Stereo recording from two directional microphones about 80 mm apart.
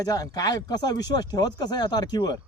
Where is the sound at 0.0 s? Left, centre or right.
Left.